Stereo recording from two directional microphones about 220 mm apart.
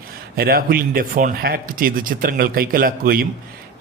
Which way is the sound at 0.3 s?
40° right (ahead or behind).